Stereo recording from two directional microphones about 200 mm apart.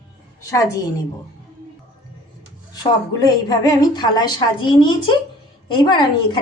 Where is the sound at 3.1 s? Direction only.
20° left (ahead or behind).